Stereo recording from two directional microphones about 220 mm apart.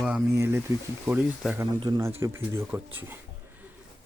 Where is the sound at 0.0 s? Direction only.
10° right (ahead or behind).